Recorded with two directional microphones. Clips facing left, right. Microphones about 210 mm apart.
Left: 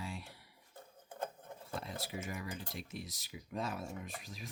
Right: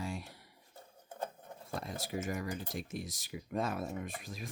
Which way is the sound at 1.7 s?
45° right (ahead or behind).